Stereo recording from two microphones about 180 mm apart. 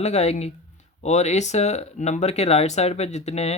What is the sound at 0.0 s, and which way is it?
Speech, 35° left (ahead or behind).